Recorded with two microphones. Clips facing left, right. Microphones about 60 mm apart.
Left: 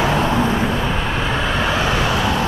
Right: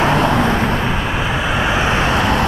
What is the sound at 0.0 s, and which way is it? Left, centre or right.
Vehicle, right.